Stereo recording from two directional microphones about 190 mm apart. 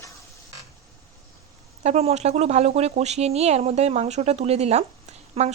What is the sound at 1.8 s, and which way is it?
Speech, 35° right (ahead or behind).